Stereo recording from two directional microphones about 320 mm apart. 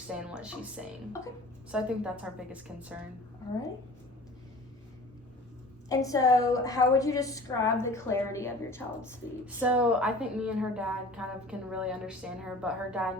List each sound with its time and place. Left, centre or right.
0.1 s a woman's voice: centre
5.9 s a woman's voice: centre
9.6 s a woman's voice: centre